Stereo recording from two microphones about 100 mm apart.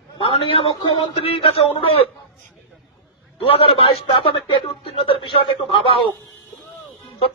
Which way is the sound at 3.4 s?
65° left (ahead or behind).